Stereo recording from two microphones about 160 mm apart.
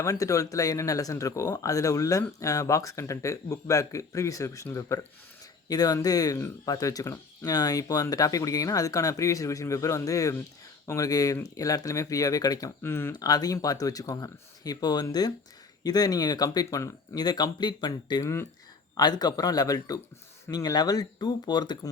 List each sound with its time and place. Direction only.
0.0 s speech: 20° left (ahead or behind)